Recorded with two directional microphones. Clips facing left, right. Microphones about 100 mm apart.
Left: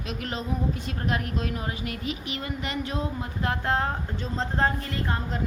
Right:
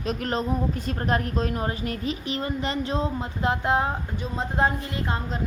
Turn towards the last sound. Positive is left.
turn(degrees=-20)  # may be behind; listen again after turning